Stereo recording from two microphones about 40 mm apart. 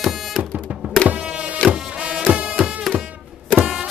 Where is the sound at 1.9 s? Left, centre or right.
Right.